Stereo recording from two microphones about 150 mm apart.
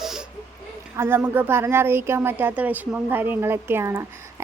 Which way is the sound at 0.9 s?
15° right (ahead or behind).